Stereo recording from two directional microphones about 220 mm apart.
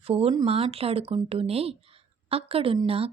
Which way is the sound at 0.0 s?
25° right (ahead or behind).